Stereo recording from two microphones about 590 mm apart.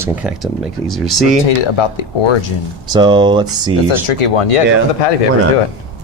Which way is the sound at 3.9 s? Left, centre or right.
Left.